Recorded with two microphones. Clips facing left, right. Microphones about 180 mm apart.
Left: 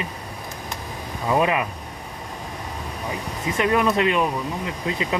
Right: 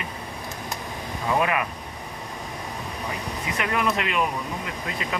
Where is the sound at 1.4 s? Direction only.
25° left (ahead or behind).